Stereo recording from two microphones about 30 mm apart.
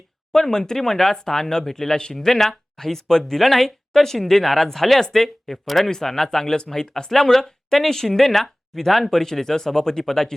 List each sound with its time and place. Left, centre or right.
0.5 s speech: centre